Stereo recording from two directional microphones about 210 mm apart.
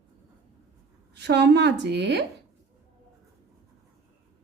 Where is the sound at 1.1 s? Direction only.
55° right (ahead or behind).